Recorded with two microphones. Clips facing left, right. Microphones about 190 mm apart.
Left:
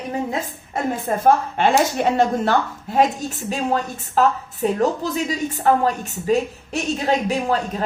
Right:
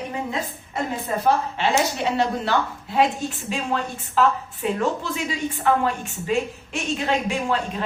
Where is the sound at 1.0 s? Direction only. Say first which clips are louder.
Left 4 dB; 50° left (ahead or behind).